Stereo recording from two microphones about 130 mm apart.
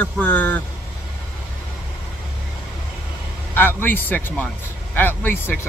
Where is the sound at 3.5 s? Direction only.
15° left (ahead or behind).